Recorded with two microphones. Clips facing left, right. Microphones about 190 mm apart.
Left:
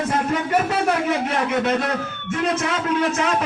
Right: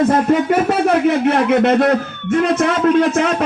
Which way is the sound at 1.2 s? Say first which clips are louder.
Right 8 dB; 65° right (ahead or behind).